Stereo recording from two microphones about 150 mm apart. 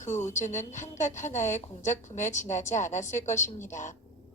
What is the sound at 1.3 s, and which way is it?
Speech, 15° left (ahead or behind).